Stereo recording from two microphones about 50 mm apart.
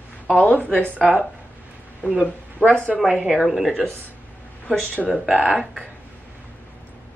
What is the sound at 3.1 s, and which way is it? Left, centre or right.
Speech, centre.